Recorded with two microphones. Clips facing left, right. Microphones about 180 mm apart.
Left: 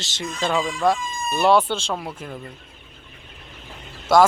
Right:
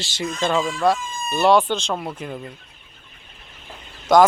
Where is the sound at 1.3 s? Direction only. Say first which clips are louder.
Right 1 dB; 10° left (ahead or behind).